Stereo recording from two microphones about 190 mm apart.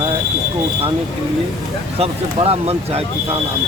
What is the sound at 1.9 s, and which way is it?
Speech, 30° right (ahead or behind).